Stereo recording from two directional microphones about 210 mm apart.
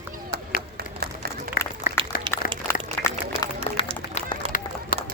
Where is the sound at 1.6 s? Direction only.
45° left (ahead or behind).